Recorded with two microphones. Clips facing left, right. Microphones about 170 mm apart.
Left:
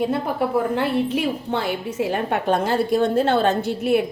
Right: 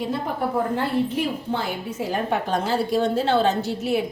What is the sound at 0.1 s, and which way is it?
A woman's voice, 80° left.